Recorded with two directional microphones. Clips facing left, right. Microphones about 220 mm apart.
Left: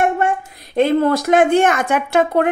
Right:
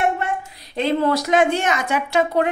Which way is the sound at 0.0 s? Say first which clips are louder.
Left 4 dB; 50° left (ahead or behind).